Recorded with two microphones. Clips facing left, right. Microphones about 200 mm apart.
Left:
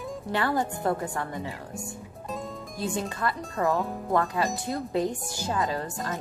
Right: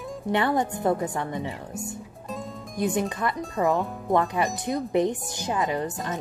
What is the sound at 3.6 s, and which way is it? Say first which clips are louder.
Speech: right 2 dB; 20° right (ahead or behind).